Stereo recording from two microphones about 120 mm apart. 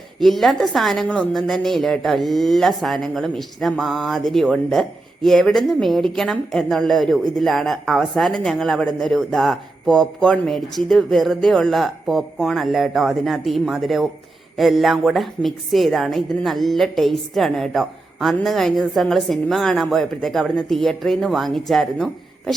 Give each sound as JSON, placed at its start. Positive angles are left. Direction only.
{"t": 0.2, "sound": "a woman's voice", "side_deg": 0}